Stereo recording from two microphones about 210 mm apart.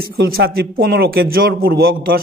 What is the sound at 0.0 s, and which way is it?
Speech, 45° right (ahead or behind).